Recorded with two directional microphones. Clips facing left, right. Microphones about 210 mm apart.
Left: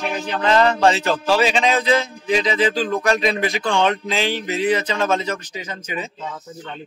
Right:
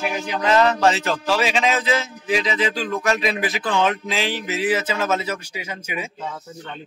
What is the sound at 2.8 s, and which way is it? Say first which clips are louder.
Speech: left 4 dB; 35° left (ahead or behind).